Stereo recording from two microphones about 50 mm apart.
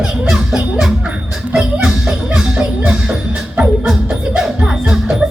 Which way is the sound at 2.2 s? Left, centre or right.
Centre.